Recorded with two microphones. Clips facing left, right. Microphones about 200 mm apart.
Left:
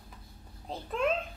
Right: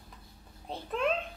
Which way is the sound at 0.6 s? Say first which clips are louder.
Right 1 dB; centre (ahead or behind).